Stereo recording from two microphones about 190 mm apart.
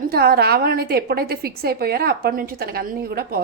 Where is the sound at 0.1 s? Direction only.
55° right (ahead or behind).